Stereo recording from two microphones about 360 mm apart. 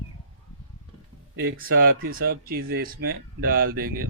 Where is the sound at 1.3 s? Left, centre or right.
Right.